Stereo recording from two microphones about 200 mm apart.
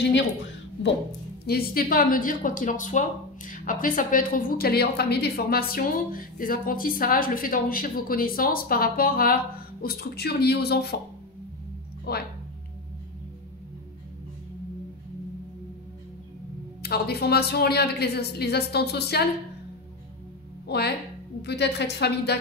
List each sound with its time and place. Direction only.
1.4 s speech: 50° left (ahead or behind)
12.1 s speech: 50° left (ahead or behind)
16.8 s speech: 50° left (ahead or behind)
20.6 s a woman's voice: 55° left (ahead or behind)